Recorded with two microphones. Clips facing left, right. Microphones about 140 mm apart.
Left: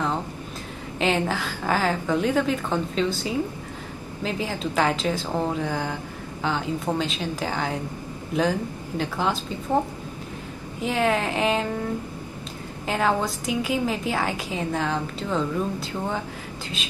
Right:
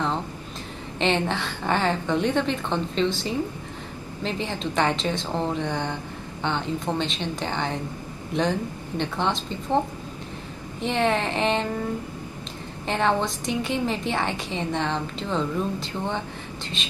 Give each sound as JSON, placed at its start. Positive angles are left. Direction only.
{"t": 0.9, "sound": "a woman's voice", "side_deg": 5}
{"t": 10.8, "sound": "a woman's voice", "side_deg": 5}
{"t": 12.8, "sound": "a woman's voice", "side_deg": 5}